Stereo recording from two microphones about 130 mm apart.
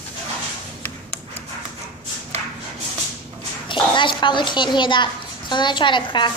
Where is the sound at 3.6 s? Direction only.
40° left (ahead or behind).